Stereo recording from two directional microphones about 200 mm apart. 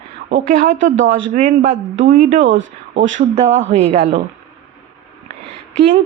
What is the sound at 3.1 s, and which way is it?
Speech, 35° right (ahead or behind).